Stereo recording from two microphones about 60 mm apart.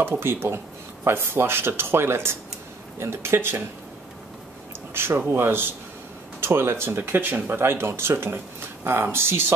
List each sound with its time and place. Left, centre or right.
0.0 s speech: right
4.9 s speech: right